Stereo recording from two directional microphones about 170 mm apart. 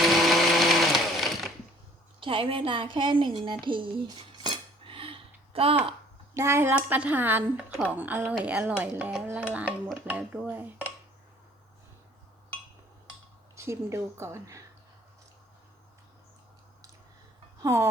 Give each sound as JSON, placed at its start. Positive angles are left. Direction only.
{"t": 0.0, "sound": "blender", "side_deg": 0}
{"t": 2.2, "sound": "a woman's voice", "side_deg": -30}
{"t": 3.7, "sound": "cutlery", "side_deg": -30}
{"t": 6.3, "sound": "speech", "side_deg": -15}
{"t": 13.6, "sound": "speech", "side_deg": -15}
{"t": 17.6, "sound": "speech", "side_deg": -15}